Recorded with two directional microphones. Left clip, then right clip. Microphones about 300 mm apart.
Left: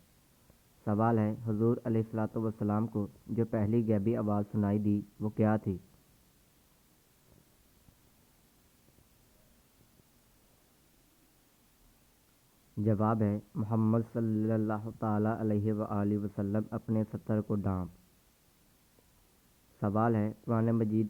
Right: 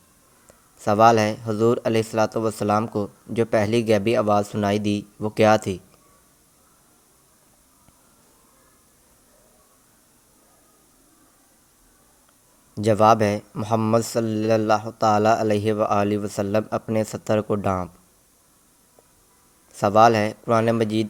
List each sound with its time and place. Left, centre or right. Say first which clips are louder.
0.9 s speech: right 15 dB; right
4.8 s speech: right 8 dB; right
5.2 s speech: right 16 dB; centre
12.8 s speech: right 15 dB; right
19.8 s speech: right 16 dB; right